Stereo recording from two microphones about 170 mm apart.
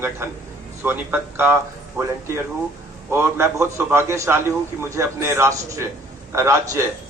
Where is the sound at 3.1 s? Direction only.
15° right (ahead or behind).